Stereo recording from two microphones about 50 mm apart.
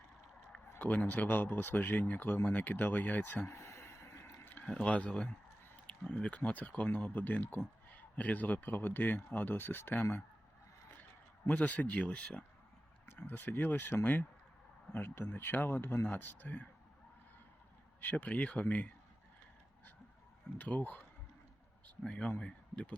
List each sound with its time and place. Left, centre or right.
0.8 s a man's voice: left
3.5 s a sound: left
4.2 s a sound: left
4.8 s a man's voice: left
11.4 s speech: left
13.1 s a man's voice: left
18.0 s a man's voice: left
20.6 s a man's voice: left
22.0 s speech: centre